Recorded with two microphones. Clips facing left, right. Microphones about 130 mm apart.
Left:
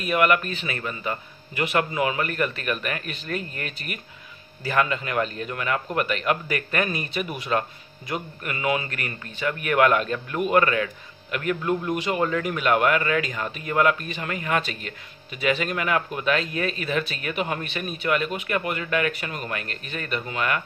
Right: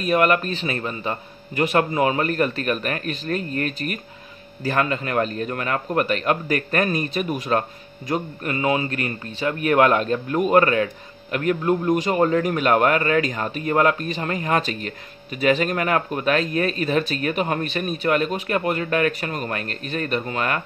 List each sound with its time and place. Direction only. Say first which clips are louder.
0.0 s speech: right 3 dB; 35° right (ahead or behind)